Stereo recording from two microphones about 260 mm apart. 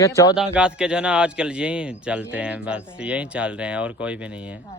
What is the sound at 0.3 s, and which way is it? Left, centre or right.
Speech, centre.